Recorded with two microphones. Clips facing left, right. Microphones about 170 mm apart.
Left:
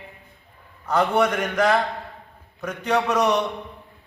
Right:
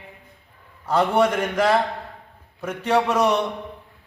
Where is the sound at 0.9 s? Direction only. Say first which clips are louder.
Right 1 dB; 30° right (ahead or behind).